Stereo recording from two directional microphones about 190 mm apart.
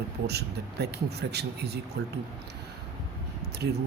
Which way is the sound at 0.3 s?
60° right (ahead or behind).